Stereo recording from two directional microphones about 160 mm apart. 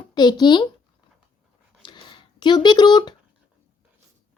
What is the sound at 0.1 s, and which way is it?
Speech, 25° left (ahead or behind).